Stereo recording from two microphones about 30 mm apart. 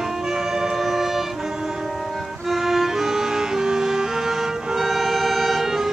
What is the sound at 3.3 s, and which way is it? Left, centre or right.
Vehicle, centre.